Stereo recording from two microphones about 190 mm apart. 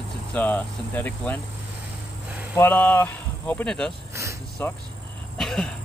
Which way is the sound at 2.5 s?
10° left (ahead or behind).